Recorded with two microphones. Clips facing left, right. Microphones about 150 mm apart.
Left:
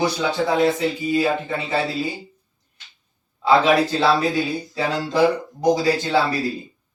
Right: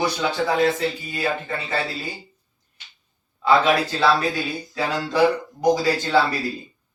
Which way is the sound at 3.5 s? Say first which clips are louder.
Left 2 dB; 25° left (ahead or behind).